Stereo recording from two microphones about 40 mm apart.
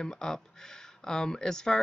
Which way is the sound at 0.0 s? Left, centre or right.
Centre.